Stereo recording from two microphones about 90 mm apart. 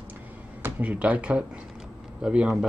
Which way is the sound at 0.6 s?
15° right (ahead or behind).